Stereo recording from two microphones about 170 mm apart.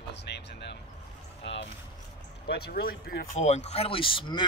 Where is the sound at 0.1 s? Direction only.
85° left.